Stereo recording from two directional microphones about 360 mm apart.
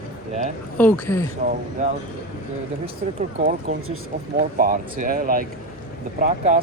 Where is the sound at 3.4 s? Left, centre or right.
Right.